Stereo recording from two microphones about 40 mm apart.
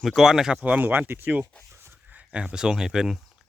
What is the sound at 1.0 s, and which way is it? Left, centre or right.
Speech, right.